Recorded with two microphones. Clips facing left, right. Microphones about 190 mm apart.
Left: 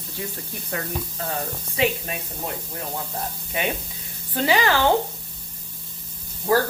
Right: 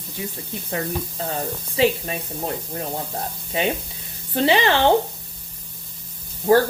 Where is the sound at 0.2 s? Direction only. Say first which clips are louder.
Right 2 dB; 20° right (ahead or behind).